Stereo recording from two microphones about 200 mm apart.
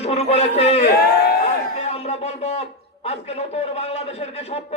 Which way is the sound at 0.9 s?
50° left (ahead or behind).